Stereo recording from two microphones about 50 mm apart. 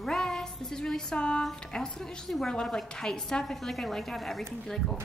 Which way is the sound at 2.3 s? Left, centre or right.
Centre.